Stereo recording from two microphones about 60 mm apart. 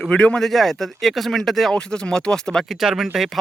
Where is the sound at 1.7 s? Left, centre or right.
Centre.